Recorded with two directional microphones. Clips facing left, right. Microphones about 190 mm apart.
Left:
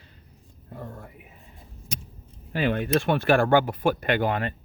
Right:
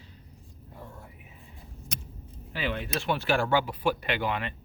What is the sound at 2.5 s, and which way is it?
Speech, 50° left (ahead or behind).